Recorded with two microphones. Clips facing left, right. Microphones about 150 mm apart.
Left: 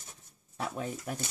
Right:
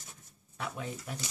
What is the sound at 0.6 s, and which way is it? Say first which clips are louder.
Speech: left 3 dB; 45° left (ahead or behind).